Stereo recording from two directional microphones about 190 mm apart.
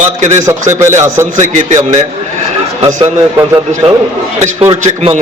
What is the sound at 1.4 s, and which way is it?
Speech, 40° right (ahead or behind).